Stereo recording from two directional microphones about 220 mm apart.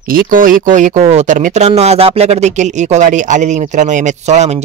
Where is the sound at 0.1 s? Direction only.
40° right (ahead or behind).